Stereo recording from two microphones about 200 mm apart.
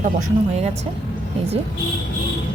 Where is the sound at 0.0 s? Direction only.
40° right (ahead or behind).